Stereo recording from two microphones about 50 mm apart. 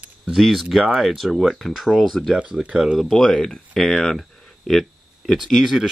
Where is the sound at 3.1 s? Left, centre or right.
Centre.